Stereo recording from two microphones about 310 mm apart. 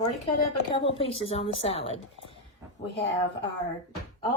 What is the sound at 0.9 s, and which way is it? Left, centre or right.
Speech, centre.